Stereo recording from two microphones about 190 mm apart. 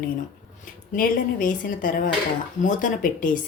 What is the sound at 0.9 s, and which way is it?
A woman's voice, 45° left (ahead or behind).